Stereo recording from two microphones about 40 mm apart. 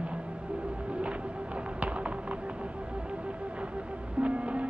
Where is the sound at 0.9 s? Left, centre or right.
Right.